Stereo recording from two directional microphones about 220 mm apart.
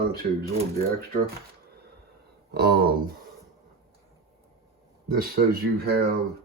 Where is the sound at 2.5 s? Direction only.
45° right (ahead or behind).